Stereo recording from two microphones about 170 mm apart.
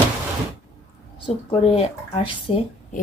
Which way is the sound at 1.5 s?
35° left (ahead or behind).